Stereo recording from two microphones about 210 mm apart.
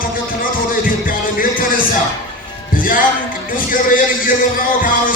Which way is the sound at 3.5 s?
40° left (ahead or behind).